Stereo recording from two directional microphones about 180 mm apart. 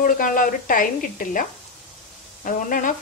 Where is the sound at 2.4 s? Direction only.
50° left (ahead or behind).